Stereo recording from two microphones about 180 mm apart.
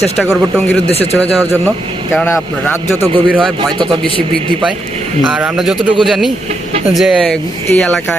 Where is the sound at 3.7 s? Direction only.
25° right (ahead or behind).